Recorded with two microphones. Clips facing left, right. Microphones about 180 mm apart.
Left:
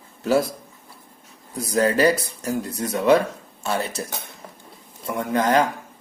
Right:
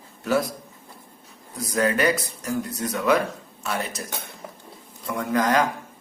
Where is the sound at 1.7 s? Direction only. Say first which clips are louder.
Left 3 dB; 30° left (ahead or behind).